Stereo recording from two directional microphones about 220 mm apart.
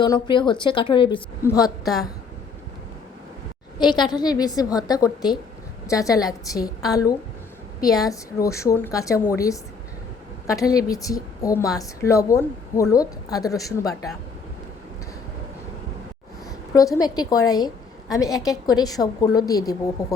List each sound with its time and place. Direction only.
0.0 s a woman's voice: 20° left (ahead or behind)
1.8 s a woman's voice: centre (ahead or behind)
3.8 s a woman's voice: 20° left (ahead or behind)
16.7 s a woman's voice: 15° left (ahead or behind)